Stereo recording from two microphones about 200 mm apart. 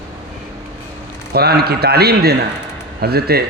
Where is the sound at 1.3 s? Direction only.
50° right (ahead or behind).